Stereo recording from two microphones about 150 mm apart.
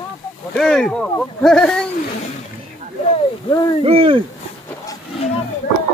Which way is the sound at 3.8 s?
40° right (ahead or behind).